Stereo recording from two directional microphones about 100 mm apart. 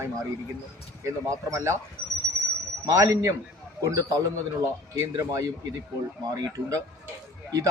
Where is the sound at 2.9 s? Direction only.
30° right (ahead or behind).